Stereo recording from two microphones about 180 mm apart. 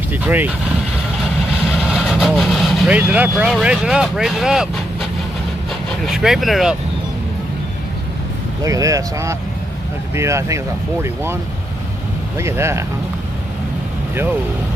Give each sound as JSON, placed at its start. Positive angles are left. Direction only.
{"t": 0.1, "sound": "speech", "side_deg": -10}
{"t": 1.9, "sound": "speech", "side_deg": -5}
{"t": 6.0, "sound": "speech", "side_deg": 0}
{"t": 8.6, "sound": "speech", "side_deg": -20}
{"t": 12.4, "sound": "speech", "side_deg": -15}